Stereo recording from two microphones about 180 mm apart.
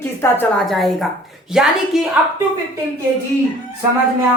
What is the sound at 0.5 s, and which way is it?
A woman's voice, centre (ahead or behind).